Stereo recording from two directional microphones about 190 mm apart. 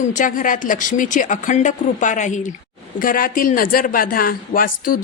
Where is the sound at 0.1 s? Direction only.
45° left (ahead or behind).